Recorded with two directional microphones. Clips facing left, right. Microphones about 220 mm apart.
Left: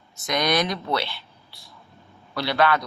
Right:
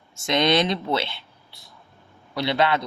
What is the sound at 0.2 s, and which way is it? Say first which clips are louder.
A man's voice: right 3 dB; 25° right (ahead or behind).